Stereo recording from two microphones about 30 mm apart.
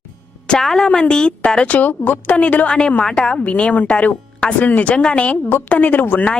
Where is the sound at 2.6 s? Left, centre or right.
Left.